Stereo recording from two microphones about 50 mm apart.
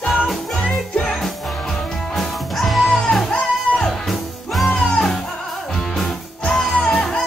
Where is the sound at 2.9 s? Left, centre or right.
Centre.